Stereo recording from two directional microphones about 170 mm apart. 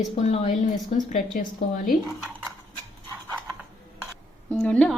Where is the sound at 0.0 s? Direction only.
40° left (ahead or behind).